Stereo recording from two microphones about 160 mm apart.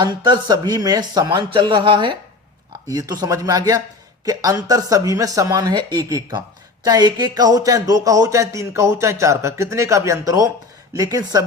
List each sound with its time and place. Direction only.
0.0 s speech: 25° right (ahead or behind)